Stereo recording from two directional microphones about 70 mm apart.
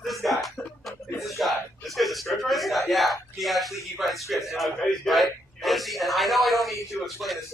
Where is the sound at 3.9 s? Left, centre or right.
Centre.